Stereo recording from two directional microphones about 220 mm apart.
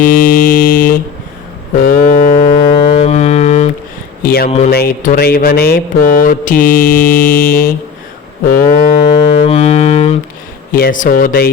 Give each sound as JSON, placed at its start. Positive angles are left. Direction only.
{"t": 0.0, "sound": "speech", "side_deg": 40}
{"t": 1.8, "sound": "music", "side_deg": 40}
{"t": 2.6, "sound": "music", "side_deg": 25}
{"t": 4.2, "sound": "speech", "side_deg": 45}
{"t": 8.8, "sound": "music", "side_deg": 25}
{"t": 10.7, "sound": "speech", "side_deg": 40}